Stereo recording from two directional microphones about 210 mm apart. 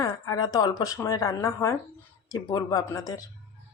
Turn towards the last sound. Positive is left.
turn(degrees=15)  # may be behind; listen again after turning